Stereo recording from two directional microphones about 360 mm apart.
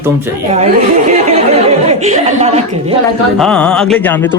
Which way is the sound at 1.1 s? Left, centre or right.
Centre.